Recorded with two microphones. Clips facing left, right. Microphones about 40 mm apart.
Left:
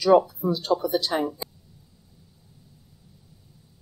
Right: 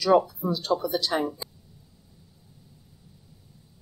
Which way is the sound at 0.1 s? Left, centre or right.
Centre.